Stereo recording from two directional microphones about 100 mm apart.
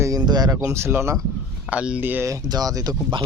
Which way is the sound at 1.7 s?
10° right (ahead or behind).